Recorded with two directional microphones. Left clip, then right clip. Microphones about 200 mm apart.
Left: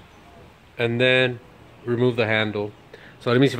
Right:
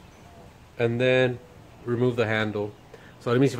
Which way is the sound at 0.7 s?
20° left (ahead or behind).